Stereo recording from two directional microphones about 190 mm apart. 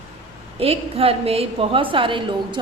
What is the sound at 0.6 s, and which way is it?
A woman's voice, 30° right (ahead or behind).